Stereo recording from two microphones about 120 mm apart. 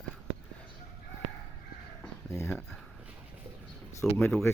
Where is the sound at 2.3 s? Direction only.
25° left (ahead or behind).